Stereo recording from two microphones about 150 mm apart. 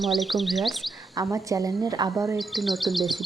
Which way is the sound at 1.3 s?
20° right (ahead or behind).